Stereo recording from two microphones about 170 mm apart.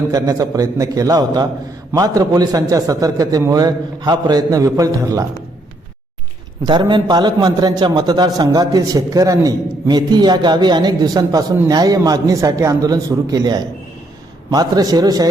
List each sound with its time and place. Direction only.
0.1 s a man's voice: 20° right (ahead or behind)
6.7 s a man's voice: 25° right (ahead or behind)